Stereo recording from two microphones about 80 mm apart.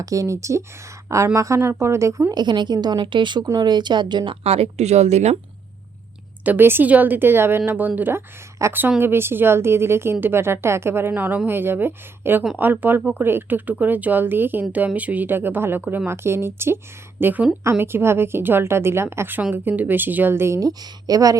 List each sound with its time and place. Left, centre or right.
0.0 s a woman's voice: right
2.3 s speech: right
6.4 s speech: right
8.6 s a woman's voice: right
9.0 s a woman's voice: right
11.1 s a woman's voice: right
20.6 s speech: right